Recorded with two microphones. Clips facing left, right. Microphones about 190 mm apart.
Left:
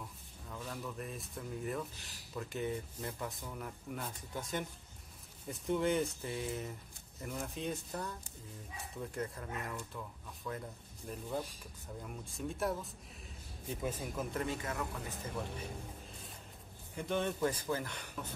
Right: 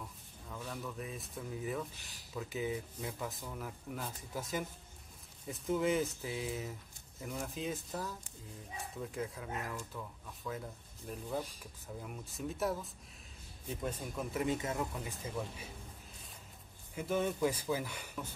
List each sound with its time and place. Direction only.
0.5 s speech: centre (ahead or behind)
14.4 s speech: 20° right (ahead or behind)
16.9 s speech: 5° right (ahead or behind)